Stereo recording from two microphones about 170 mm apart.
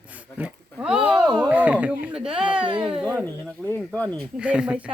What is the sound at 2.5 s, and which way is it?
Speech, 30° right (ahead or behind).